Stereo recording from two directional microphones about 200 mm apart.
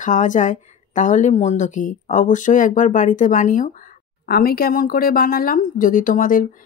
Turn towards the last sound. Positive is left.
turn(degrees=45)  # may be behind; listen again after turning